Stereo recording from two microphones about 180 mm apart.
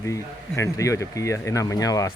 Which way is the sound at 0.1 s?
15° left (ahead or behind).